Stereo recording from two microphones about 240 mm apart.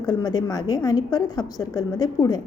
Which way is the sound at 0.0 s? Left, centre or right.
Centre.